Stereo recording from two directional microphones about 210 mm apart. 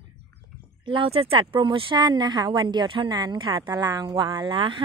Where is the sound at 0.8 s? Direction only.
25° right (ahead or behind).